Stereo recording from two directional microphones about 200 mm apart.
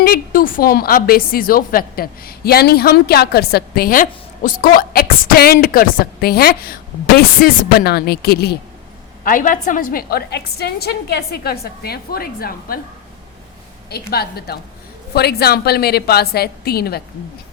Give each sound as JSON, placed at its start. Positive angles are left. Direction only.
{"t": 0.0, "sound": "speech", "side_deg": 45}
{"t": 9.2, "sound": "speech", "side_deg": 40}
{"t": 14.1, "sound": "speech", "side_deg": 50}